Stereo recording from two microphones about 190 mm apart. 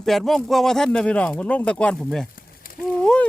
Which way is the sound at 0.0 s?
Centre (ahead or behind).